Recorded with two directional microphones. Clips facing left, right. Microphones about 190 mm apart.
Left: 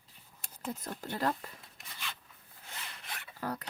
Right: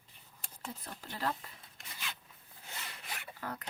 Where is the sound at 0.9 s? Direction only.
50° left (ahead or behind).